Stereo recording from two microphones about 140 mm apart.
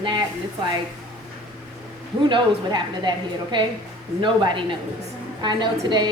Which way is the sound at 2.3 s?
35° right (ahead or behind).